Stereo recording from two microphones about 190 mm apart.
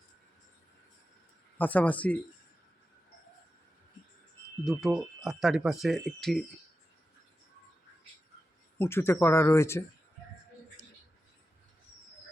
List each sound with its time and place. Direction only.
1.5 s speech: 10° left (ahead or behind)
4.6 s speech: centre (ahead or behind)
8.8 s speech: 10° left (ahead or behind)